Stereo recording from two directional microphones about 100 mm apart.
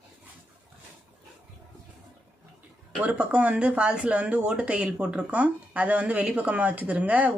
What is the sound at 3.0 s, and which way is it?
Speech, 15° right (ahead or behind).